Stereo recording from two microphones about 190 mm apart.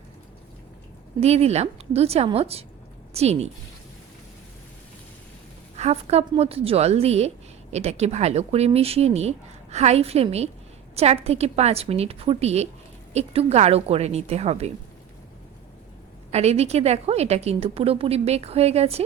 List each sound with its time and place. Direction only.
1.2 s speech: 35° right (ahead or behind)
5.7 s speech: 35° right (ahead or behind)
16.3 s speech: 35° right (ahead or behind)